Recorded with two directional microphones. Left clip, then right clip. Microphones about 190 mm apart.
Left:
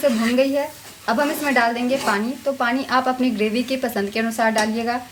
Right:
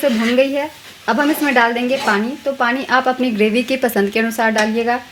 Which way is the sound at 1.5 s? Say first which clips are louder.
Right 3 dB; 35° right (ahead or behind).